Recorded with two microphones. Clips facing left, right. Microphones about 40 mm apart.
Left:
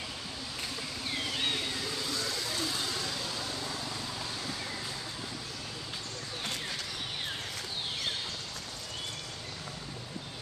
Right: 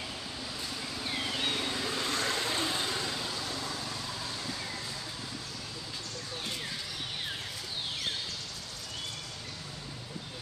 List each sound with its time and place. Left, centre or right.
1.0 s vehicle: centre
2.0 s vehicle: right; by 4.3 s centre